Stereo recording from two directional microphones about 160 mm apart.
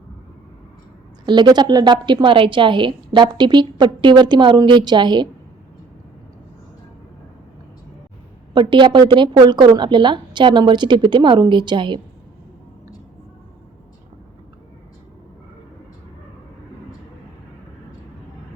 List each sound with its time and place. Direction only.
1.2 s a woman's voice: 25° right (ahead or behind)
8.5 s a woman's voice: 30° right (ahead or behind)